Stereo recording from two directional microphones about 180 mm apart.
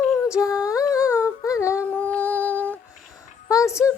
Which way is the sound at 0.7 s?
15° left (ahead or behind).